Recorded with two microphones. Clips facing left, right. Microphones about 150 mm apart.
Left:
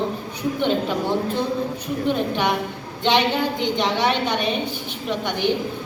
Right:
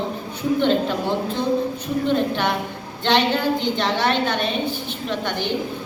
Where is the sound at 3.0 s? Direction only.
15° left (ahead or behind).